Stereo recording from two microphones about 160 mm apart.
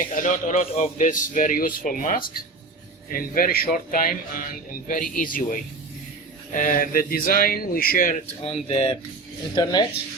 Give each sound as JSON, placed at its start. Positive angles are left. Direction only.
{"t": 0.0, "sound": "speech", "side_deg": 55}
{"t": 8.6, "sound": "speech", "side_deg": 30}
{"t": 9.6, "sound": "speech", "side_deg": 20}